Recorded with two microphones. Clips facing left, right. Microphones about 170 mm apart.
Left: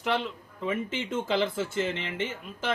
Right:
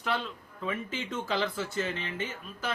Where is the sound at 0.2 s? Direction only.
20° left (ahead or behind).